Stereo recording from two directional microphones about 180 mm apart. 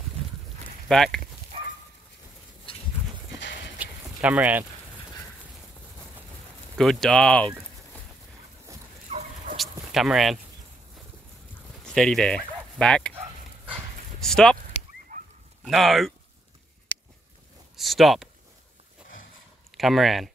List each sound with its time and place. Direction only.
0.8 s speech: centre (ahead or behind)
1.5 s bow-wow: 30° right (ahead or behind)
2.7 s a sound: 30° left (ahead or behind)
3.7 s a sound: 10° right (ahead or behind)
6.8 s speech: 5° left (ahead or behind)
9.1 s a sound: 35° right (ahead or behind)
9.6 s dog: centre (ahead or behind)
11.8 s speech: 5° left (ahead or behind)
13.1 s a sound: 30° right (ahead or behind)
14.2 s speech: 5° left (ahead or behind)
15.1 s dog: 45° right (ahead or behind)
15.6 s speech: centre (ahead or behind)
17.7 s speech: centre (ahead or behind)
19.8 s speech: centre (ahead or behind)